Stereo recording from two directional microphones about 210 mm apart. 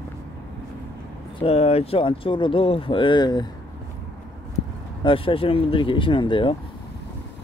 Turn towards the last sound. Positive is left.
turn(degrees=25)  # may be behind; listen again after turning